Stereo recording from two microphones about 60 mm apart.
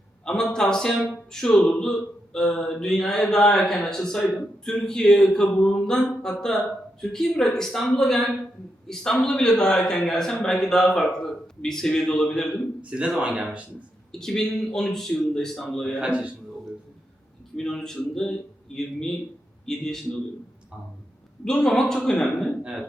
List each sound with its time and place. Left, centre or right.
0.3 s a man's voice: centre
12.8 s speech: centre
14.1 s a man's voice: centre
16.0 s speech: centre
17.6 s a man's voice: centre
21.4 s a man's voice: centre